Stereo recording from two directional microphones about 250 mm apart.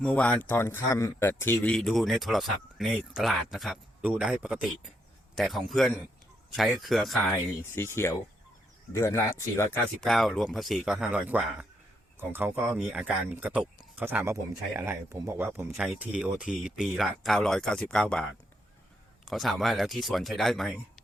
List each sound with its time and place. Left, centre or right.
0.0 s a man's voice: centre